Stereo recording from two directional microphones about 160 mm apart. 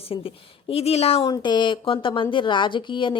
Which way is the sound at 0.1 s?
35° left (ahead or behind).